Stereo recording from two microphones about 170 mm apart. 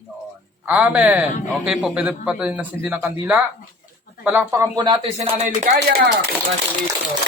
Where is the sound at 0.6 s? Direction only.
10° right (ahead or behind); by 5.3 s 35° right (ahead or behind).